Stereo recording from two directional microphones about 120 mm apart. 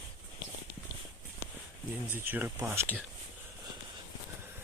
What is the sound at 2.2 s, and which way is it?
Speech, 15° right (ahead or behind).